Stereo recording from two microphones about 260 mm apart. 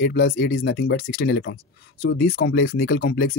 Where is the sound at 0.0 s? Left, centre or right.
Left.